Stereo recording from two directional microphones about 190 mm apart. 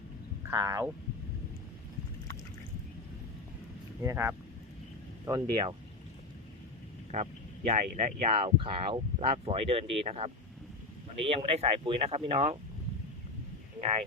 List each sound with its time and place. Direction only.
0.4 s speech: 15° right (ahead or behind)
4.0 s speech: 15° right (ahead or behind)
7.1 s speech: 40° right (ahead or behind)